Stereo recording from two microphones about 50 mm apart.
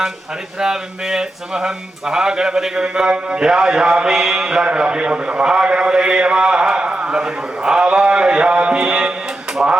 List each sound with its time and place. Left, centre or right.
0.6 s speech: centre